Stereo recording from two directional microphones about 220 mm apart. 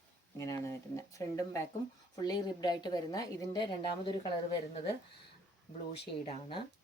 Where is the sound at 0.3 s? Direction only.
15° left (ahead or behind).